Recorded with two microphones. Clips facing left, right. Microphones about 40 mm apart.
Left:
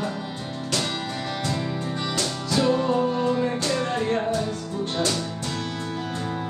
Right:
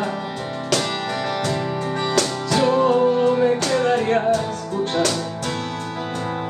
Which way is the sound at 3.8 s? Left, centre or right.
Right.